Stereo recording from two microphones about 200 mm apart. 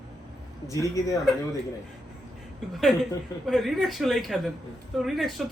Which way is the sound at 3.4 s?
Centre (ahead or behind).